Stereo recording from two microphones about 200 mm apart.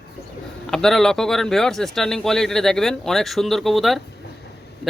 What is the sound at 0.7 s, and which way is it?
Speech, centre (ahead or behind).